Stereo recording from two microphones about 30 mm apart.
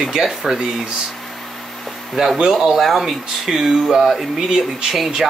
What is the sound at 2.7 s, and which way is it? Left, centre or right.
Speech, centre.